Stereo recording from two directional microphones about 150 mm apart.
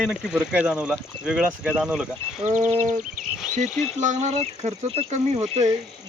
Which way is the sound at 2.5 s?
55° right (ahead or behind).